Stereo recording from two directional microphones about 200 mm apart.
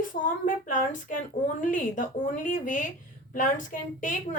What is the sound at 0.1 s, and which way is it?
A woman's voice, 40° left (ahead or behind).